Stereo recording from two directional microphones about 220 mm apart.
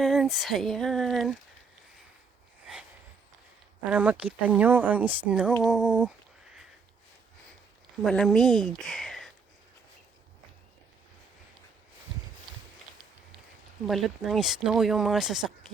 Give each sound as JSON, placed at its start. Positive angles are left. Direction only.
{"t": 0.0, "sound": "a sound", "side_deg": 0}
{"t": 3.8, "sound": "speech", "side_deg": -5}
{"t": 8.0, "sound": "speech", "side_deg": 0}
{"t": 13.8, "sound": "speech", "side_deg": 0}